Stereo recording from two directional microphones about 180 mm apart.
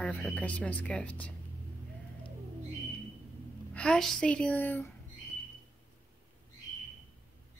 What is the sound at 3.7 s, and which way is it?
A woman's voice, 5° left (ahead or behind).